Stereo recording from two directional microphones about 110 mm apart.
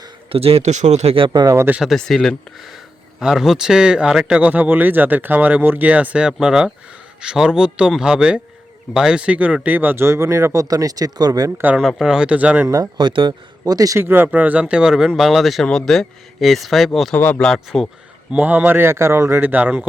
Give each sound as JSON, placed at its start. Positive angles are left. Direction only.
{"t": 0.3, "sound": "speech", "side_deg": -60}
{"t": 1.3, "sound": "a man's voice", "side_deg": -40}
{"t": 1.5, "sound": "speech", "side_deg": -20}
{"t": 1.8, "sound": "speech", "side_deg": 0}
{"t": 11.6, "sound": "speech", "side_deg": -10}
{"t": 12.6, "sound": "a man's voice", "side_deg": -30}
{"t": 13.0, "sound": "a man's voice", "side_deg": -45}
{"t": 14.0, "sound": "speech", "side_deg": -20}
{"t": 17.2, "sound": "speech", "side_deg": 15}
{"t": 18.3, "sound": "speech", "side_deg": -15}